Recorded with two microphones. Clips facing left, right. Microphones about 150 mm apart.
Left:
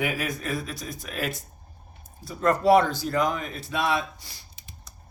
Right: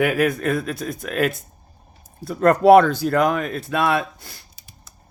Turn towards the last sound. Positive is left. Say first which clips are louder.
# right 5 dB
turn(degrees=-55)  # may be behind; listen again after turning